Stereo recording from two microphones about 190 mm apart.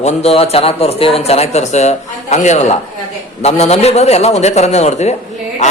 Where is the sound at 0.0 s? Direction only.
35° left (ahead or behind).